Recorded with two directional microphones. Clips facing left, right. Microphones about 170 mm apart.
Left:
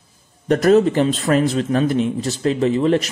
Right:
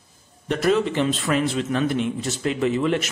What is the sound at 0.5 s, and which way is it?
Speech, 45° left (ahead or behind).